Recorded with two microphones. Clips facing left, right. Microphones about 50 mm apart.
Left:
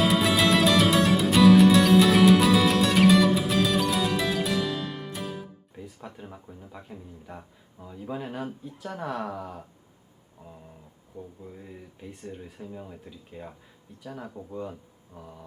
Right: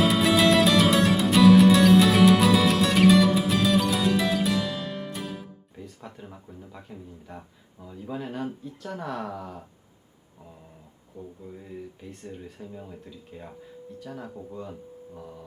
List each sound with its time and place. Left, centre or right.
0.0 s music: centre
11.4 s speech: centre